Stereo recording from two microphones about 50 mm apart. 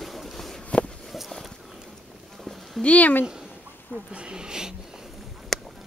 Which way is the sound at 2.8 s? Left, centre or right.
Left.